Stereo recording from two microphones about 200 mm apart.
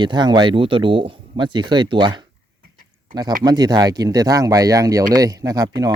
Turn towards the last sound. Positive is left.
turn(degrees=-20)  # may be behind; listen again after turning